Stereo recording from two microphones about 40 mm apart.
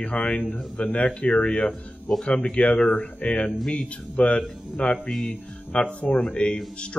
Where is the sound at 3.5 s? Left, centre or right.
Centre.